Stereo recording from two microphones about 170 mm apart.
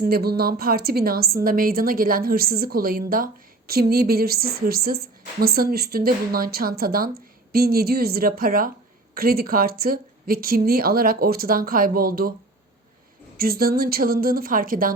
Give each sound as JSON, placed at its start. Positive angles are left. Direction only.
{"t": 0.0, "sound": "a woman's voice", "side_deg": -65}
{"t": 13.3, "sound": "a woman's voice", "side_deg": -60}